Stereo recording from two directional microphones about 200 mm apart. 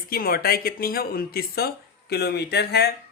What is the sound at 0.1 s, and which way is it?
Speech, 50° left (ahead or behind).